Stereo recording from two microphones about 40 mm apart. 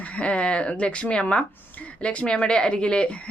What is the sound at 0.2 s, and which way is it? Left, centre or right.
Speech, left.